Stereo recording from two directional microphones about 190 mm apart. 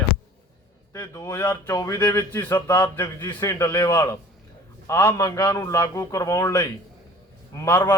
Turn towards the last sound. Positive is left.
turn(degrees=10)  # may be behind; listen again after turning